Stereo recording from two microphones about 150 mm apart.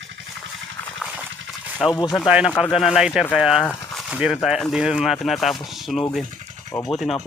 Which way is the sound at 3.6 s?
5° left (ahead or behind).